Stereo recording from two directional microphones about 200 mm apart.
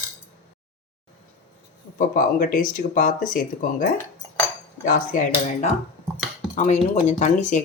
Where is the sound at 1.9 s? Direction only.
45° left (ahead or behind).